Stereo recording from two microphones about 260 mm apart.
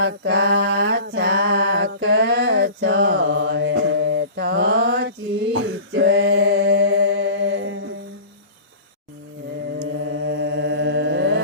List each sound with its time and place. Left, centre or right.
0.0 s a sound: right
5.9 s a capella: right
9.7 s mantra: right